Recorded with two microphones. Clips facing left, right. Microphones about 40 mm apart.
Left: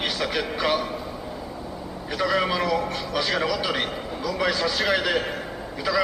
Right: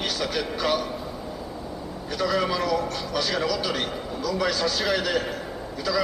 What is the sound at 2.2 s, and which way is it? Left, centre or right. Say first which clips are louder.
Speech: left 1 dB; centre.